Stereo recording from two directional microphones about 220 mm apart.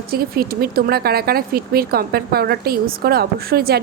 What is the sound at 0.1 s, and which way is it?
Speech, 45° right (ahead or behind).